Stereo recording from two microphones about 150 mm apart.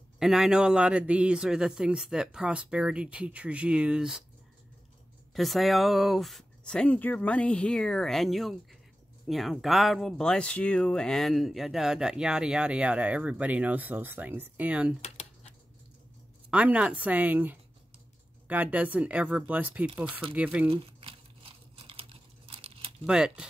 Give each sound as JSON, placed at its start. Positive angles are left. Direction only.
{"t": 0.2, "sound": "a man's voice", "side_deg": -5}
{"t": 5.3, "sound": "speech", "side_deg": 0}
{"t": 15.0, "sound": "a sound", "side_deg": 45}
{"t": 16.4, "sound": "a man's voice", "side_deg": -10}
{"t": 20.6, "sound": "crumpling", "side_deg": -35}
{"t": 23.0, "sound": "speech", "side_deg": -5}